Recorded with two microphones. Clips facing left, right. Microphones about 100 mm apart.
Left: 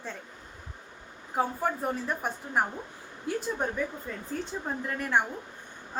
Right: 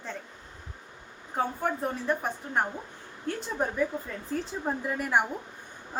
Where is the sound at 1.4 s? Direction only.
5° left (ahead or behind).